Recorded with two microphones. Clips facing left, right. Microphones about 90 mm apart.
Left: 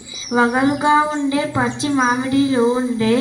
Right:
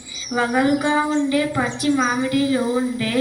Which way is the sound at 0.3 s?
25° left (ahead or behind).